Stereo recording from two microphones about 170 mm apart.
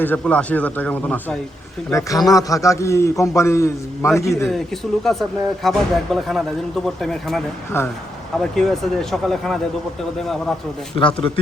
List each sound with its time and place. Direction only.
0.0 s a man's voice: 10° left (ahead or behind)
1.9 s a man's voice: 20° left (ahead or behind)
4.4 s speech: centre (ahead or behind)
7.8 s a man's voice: 15° left (ahead or behind)
8.4 s speech: centre (ahead or behind)
10.9 s a man's voice: 30° left (ahead or behind)